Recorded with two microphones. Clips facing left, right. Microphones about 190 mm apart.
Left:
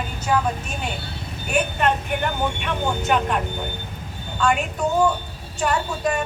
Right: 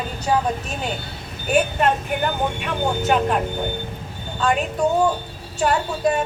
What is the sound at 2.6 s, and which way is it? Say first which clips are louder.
Speech: right 2 dB; 35° right (ahead or behind).